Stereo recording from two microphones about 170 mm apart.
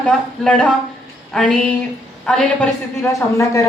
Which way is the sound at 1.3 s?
5° left (ahead or behind).